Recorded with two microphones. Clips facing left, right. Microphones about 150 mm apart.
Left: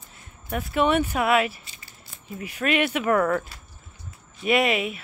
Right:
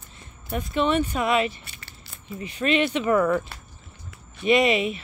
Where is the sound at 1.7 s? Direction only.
70° right (ahead or behind).